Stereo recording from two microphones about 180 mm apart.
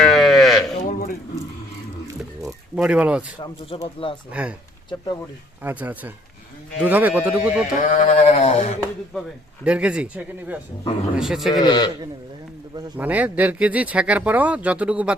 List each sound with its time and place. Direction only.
0.0 s sheep: centre (ahead or behind)
0.9 s a sound: 50° left (ahead or behind)
2.7 s speech: 5° right (ahead or behind)
3.4 s speech: 25° left (ahead or behind)
4.3 s speech: 5° right (ahead or behind)
5.6 s speech: 10° right (ahead or behind)
7.8 s sheep: 45° left (ahead or behind)
9.6 s speech: 5° right (ahead or behind)
11.5 s speech: 20° left (ahead or behind)
13.0 s speech: 10° right (ahead or behind)